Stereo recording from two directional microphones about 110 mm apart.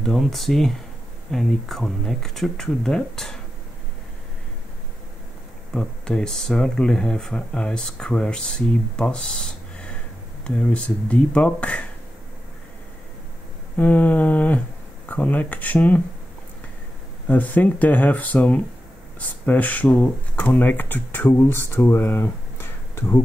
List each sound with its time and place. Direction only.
0.0 s speech: centre (ahead or behind)
5.7 s speech: 5° left (ahead or behind)
13.7 s speech: 15° left (ahead or behind)
17.3 s speech: 15° left (ahead or behind)